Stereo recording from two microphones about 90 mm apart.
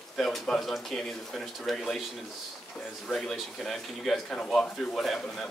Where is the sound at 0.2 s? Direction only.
5° left (ahead or behind).